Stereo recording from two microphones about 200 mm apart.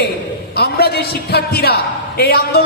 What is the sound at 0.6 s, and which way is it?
A man's voice, 50° left (ahead or behind).